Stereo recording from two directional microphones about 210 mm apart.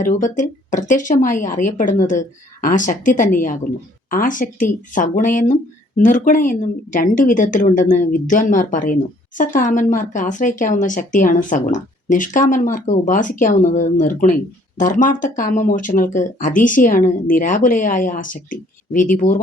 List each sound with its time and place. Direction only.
0.0 s speech: 35° left (ahead or behind)